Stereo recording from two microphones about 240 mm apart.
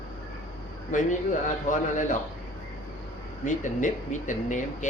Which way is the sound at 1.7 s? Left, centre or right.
Left.